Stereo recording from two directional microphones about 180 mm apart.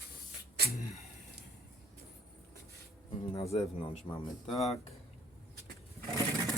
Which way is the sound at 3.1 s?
20° left (ahead or behind).